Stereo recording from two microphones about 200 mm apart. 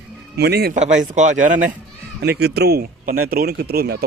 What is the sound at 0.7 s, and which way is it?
Speech, 40° right (ahead or behind).